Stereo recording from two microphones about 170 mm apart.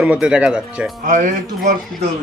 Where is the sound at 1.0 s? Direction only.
50° right (ahead or behind).